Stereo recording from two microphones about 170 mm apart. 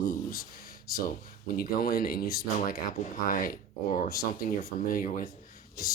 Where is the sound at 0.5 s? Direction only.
60° left (ahead or behind).